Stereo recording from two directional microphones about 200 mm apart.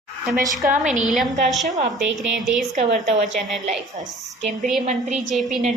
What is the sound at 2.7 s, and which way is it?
Speech, 35° right (ahead or behind).